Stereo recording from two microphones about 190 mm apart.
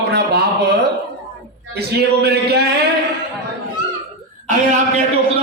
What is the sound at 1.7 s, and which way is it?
A man's voice, 60° right (ahead or behind).